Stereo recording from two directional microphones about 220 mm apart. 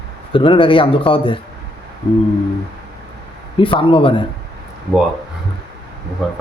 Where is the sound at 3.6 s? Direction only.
25° left (ahead or behind).